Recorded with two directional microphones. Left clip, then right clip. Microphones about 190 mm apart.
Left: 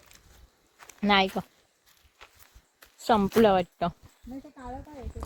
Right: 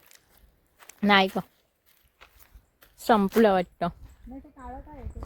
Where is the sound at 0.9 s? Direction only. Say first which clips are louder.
Right 2 dB; 25° right (ahead or behind).